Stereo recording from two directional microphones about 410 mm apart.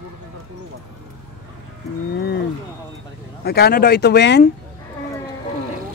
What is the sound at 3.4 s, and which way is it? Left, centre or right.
A man's voice, left.